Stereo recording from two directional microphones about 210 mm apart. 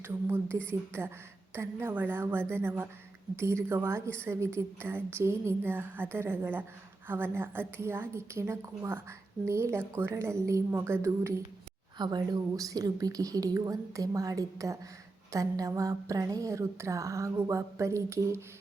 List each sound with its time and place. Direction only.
0.7 s a woman's voice: 10° right (ahead or behind)